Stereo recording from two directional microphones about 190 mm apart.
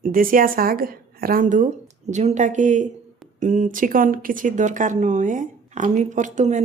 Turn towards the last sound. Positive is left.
turn(degrees=-40)  # may be behind; listen again after turning